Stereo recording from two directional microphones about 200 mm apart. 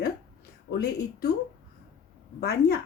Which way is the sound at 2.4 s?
50° left (ahead or behind).